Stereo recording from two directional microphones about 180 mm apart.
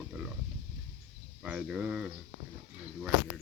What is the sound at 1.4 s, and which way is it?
Speech, 5° right (ahead or behind).